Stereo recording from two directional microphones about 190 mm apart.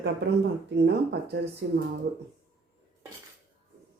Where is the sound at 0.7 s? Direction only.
60° right (ahead or behind).